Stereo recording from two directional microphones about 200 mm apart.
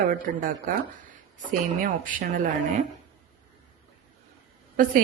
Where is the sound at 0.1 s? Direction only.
40° right (ahead or behind).